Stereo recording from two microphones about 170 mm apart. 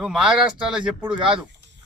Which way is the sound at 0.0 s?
5° right (ahead or behind).